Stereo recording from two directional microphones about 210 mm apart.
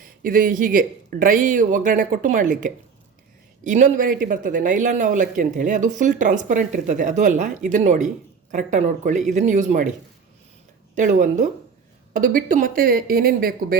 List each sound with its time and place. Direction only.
0.0 s speech: 40° right (ahead or behind)
10.9 s speech: 40° right (ahead or behind)